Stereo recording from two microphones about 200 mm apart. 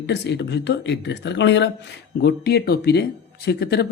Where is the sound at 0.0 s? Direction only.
60° left (ahead or behind).